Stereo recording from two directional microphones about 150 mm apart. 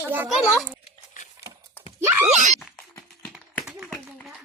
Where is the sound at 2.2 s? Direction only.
50° right (ahead or behind).